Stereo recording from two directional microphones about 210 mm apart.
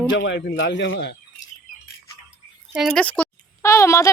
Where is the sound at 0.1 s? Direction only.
55° left (ahead or behind).